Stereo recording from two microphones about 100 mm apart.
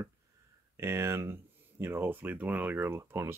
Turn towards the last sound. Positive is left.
turn(degrees=-25)  # may be behind; listen again after turning